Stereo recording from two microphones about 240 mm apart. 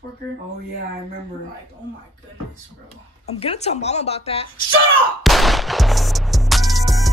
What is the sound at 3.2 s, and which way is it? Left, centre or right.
Speech, left.